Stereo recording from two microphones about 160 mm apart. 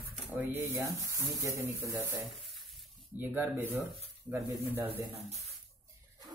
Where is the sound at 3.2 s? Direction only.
15° right (ahead or behind).